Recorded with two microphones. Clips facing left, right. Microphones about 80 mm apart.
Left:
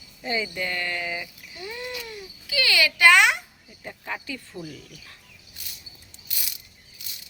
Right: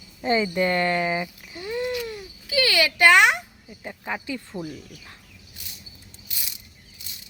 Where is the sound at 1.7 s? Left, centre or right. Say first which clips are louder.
Right 9 dB; right.